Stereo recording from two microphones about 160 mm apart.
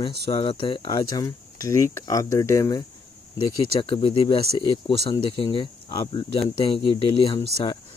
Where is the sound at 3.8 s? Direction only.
30° left (ahead or behind).